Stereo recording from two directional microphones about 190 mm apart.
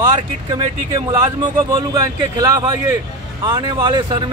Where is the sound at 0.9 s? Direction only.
25° right (ahead or behind).